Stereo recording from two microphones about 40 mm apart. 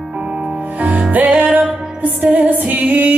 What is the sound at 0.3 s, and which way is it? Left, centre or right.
Music, right.